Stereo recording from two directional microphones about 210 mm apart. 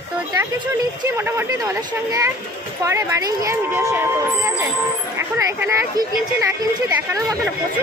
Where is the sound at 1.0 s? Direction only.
10° right (ahead or behind).